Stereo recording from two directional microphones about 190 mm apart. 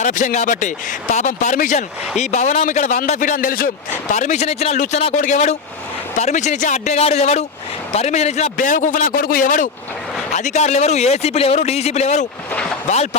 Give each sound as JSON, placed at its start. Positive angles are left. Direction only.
{"t": 0.0, "sound": "a man's voice", "side_deg": 40}